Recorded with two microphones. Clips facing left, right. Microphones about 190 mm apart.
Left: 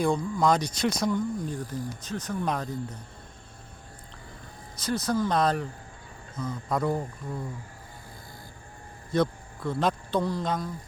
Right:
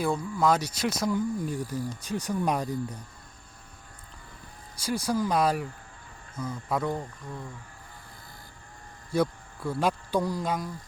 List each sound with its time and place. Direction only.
0.3 s speech: 5° right (ahead or behind)
4.8 s speech: 10° right (ahead or behind)
6.9 s speech: 15° left (ahead or behind)
9.1 s speech: 10° right (ahead or behind)